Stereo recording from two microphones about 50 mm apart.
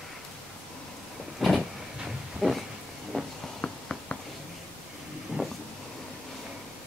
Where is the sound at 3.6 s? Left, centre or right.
Left.